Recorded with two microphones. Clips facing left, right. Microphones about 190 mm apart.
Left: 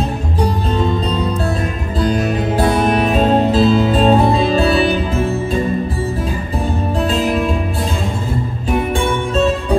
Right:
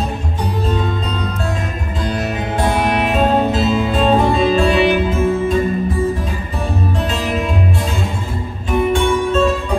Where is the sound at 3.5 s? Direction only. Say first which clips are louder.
Left 4 dB; 35° left (ahead or behind).